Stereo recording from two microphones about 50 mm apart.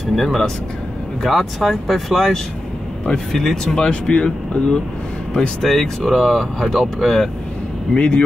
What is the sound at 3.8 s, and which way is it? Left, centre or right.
Speech, left.